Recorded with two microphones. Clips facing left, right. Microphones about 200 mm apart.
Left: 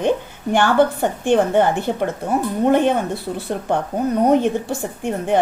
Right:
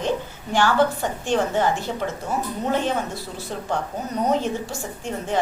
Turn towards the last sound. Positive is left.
turn(degrees=60)  # may be behind; listen again after turning